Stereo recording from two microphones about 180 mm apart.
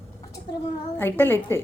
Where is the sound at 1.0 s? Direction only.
10° left (ahead or behind).